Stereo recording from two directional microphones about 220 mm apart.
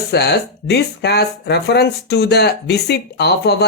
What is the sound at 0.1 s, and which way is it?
Speech, 50° left (ahead or behind).